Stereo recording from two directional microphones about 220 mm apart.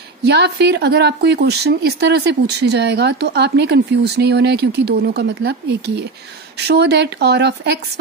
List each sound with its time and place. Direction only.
0.2 s speech: 50° right (ahead or behind)